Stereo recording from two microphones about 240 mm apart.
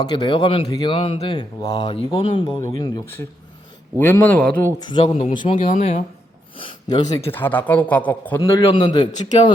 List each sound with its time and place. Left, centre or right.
0.0 s a man's voice: centre
4.9 s speech: left
6.6 s a man's voice: centre